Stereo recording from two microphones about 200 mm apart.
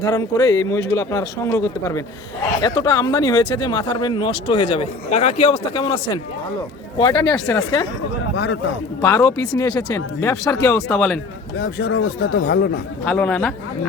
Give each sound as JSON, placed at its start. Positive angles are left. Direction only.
{"t": 0.0, "sound": "speech", "side_deg": 20}
{"t": 7.0, "sound": "speech", "side_deg": 15}
{"t": 8.4, "sound": "a man's voice", "side_deg": 60}
{"t": 9.0, "sound": "speech", "side_deg": 15}
{"t": 11.6, "sound": "speech", "side_deg": 55}
{"t": 13.1, "sound": "speech", "side_deg": 5}